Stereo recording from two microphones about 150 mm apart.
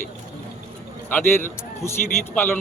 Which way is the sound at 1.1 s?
15° left (ahead or behind).